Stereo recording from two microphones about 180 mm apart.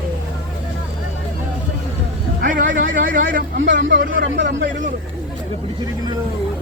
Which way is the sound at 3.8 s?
85° right.